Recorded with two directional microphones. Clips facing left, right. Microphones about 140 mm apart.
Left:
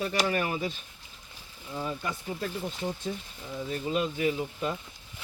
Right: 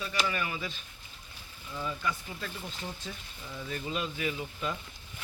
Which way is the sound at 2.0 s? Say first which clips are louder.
Left 2 dB; 45° left (ahead or behind).